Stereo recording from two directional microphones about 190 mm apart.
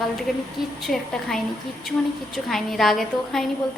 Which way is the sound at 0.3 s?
Centre (ahead or behind).